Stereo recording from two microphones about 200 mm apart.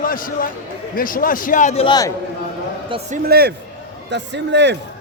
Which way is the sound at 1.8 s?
20° left (ahead or behind).